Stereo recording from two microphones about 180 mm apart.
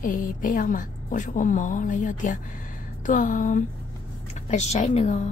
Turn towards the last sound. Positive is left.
turn(degrees=40)  # may be behind; listen again after turning